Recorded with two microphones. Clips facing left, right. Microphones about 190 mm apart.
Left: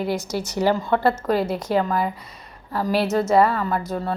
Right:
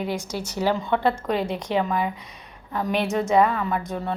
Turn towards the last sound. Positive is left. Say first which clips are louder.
# left 2 dB
turn(degrees=0)  # may be behind; listen again after turning